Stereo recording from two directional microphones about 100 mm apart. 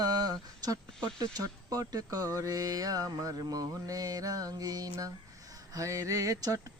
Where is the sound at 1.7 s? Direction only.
35° right (ahead or behind).